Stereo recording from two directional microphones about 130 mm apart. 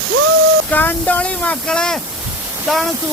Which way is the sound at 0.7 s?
15° left (ahead or behind).